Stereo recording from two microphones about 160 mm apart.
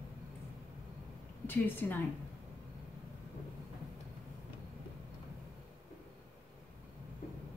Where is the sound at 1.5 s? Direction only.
10° left (ahead or behind).